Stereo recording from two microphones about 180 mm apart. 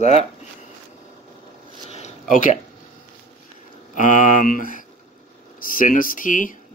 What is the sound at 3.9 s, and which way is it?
Speech, 45° left (ahead or behind).